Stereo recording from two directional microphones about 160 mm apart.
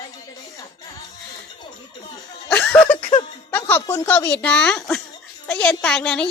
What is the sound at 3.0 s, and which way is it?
Giggle, 45° left (ahead or behind).